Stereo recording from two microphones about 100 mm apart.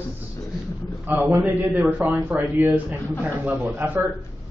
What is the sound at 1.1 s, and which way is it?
A man's voice, 20° right (ahead or behind).